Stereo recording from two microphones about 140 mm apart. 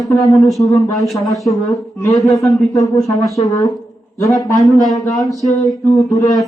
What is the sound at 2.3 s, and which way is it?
Speech, centre (ahead or behind).